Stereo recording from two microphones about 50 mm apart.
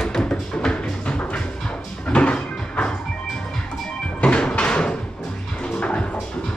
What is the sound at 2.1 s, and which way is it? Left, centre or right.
Music, left.